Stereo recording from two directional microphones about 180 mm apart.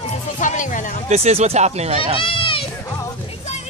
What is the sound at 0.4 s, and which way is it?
Music, 45° left (ahead or behind).